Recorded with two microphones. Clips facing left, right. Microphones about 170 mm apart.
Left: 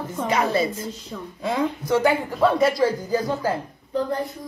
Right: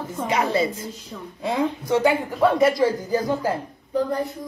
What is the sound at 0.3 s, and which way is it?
Speech, 20° right (ahead or behind).